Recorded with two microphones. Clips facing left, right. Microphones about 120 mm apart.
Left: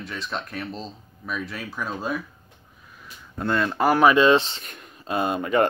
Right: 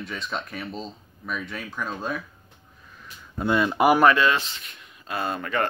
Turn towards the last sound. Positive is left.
turn(degrees=20)  # may be behind; listen again after turning